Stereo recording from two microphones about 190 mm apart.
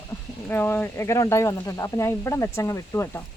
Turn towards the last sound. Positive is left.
turn(degrees=15)  # may be behind; listen again after turning